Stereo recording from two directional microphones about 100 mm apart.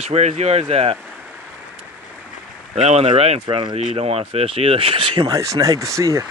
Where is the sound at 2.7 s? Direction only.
90° right.